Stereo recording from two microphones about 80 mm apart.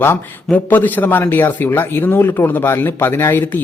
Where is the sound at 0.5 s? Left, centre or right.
Left.